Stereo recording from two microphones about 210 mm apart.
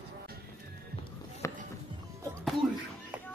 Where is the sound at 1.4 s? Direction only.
15° left (ahead or behind).